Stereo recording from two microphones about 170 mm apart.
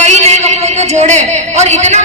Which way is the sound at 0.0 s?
40° right (ahead or behind).